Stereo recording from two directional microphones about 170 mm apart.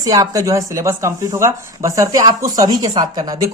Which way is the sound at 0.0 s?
20° right (ahead or behind).